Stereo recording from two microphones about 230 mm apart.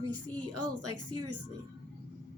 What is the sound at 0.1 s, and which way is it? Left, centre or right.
A woman's voice, right.